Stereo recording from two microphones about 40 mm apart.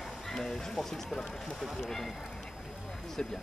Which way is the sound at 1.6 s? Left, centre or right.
Centre.